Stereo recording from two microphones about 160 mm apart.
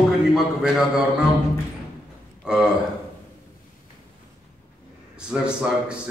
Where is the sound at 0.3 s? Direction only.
5° right (ahead or behind).